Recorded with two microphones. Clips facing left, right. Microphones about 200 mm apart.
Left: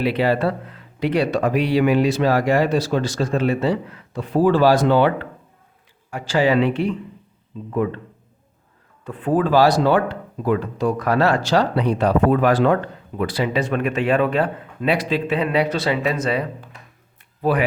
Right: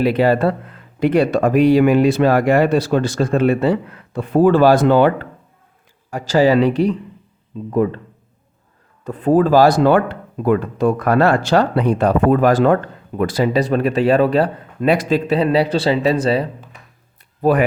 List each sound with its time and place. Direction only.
0.0 s speech: 45° right (ahead or behind)
9.0 s speech: 40° right (ahead or behind)
17.4 s speech: 45° right (ahead or behind)